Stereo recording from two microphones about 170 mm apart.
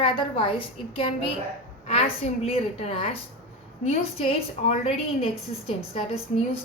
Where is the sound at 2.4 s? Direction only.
35° left (ahead or behind).